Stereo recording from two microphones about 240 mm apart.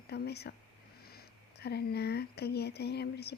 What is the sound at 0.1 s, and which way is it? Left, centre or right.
A woman's voice, left.